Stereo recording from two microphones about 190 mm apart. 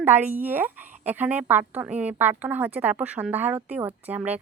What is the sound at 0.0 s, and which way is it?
Speech, 10° right (ahead or behind).